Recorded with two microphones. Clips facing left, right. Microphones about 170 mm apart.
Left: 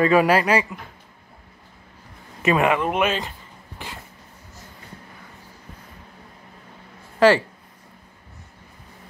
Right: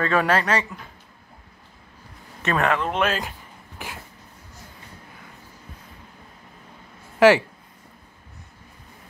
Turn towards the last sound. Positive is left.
turn(degrees=-15)  # may be behind; listen again after turning